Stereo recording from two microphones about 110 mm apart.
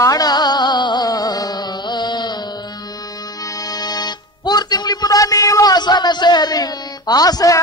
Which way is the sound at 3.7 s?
35° left (ahead or behind).